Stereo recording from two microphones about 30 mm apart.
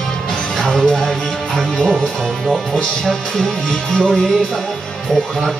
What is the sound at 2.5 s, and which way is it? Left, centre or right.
Speech, centre.